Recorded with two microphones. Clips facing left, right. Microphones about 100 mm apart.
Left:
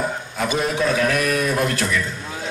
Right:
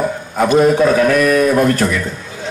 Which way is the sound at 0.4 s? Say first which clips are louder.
Right 11 dB; 50° right (ahead or behind).